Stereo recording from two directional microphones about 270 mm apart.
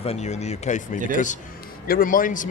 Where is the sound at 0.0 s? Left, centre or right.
Left.